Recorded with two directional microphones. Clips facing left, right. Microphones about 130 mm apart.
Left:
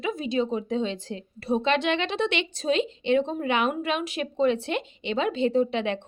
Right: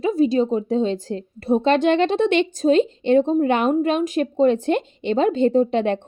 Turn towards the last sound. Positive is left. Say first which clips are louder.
# right 6 dB
turn(degrees=-45)  # may be behind; listen again after turning